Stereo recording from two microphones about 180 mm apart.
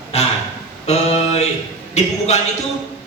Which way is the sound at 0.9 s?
35° left (ahead or behind).